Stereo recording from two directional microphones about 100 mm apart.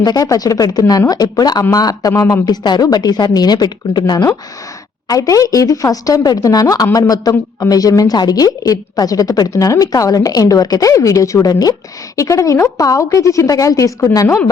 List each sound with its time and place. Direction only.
0.0 s a woman's voice: 40° left (ahead or behind)